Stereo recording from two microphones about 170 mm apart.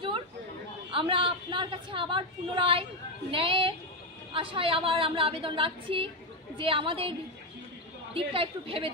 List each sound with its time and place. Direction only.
0.9 s a woman's voice: 30° right (ahead or behind)